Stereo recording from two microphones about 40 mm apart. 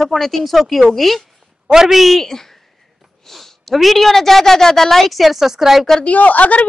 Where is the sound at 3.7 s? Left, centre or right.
Centre.